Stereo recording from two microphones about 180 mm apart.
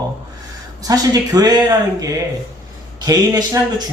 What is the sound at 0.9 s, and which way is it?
Speech, 20° right (ahead or behind).